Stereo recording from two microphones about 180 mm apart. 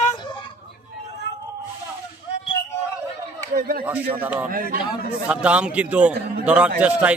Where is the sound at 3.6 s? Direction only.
55° right (ahead or behind).